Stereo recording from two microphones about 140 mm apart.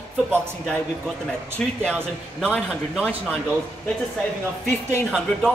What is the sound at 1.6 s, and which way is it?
Speech, 5° left (ahead or behind).